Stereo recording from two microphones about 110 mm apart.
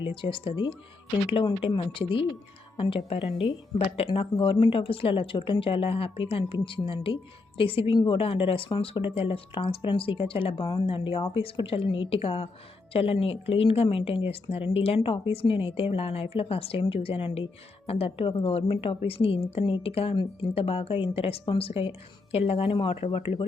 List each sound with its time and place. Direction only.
0.0 s speech: 50° left (ahead or behind)